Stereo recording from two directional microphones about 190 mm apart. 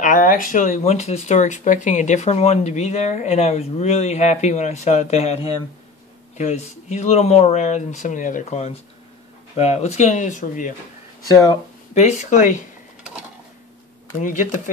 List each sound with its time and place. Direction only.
0.0 s speech: 45° left (ahead or behind)
11.9 s speech: 40° left (ahead or behind)
14.2 s speech: 40° left (ahead or behind)